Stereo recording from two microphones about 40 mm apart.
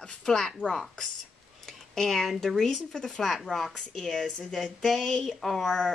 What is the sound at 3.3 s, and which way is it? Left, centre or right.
Speech, centre.